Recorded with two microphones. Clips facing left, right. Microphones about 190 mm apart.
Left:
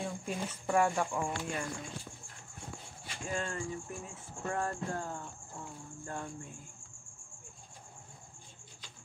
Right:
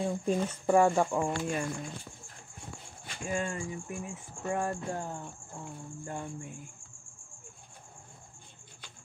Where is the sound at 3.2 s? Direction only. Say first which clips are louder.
Right 3 dB; 15° right (ahead or behind).